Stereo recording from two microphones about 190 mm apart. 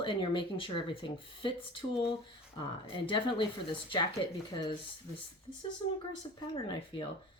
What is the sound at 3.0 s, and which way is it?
Speech, 25° left (ahead or behind).